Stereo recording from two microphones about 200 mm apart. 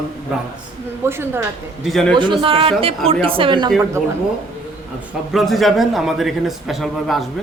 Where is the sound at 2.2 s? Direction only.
25° right (ahead or behind).